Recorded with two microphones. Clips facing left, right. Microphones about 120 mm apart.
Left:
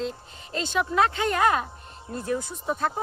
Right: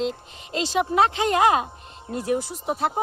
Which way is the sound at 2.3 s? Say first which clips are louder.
Right 4 dB; 80° right.